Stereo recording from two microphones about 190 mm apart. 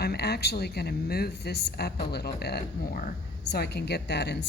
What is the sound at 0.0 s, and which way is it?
Speech, 55° left (ahead or behind).